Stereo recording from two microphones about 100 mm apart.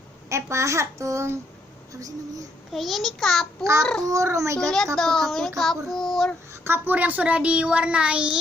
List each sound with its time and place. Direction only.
0.3 s a child's voice: 30° right (ahead or behind)
2.7 s child singing: centre (ahead or behind)
3.6 s a child's voice: 30° right (ahead or behind)
4.9 s child singing: 5° left (ahead or behind)
6.5 s a child's voice: 20° right (ahead or behind)